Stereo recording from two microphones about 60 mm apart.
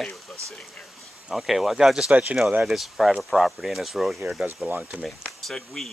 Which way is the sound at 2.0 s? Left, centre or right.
Right.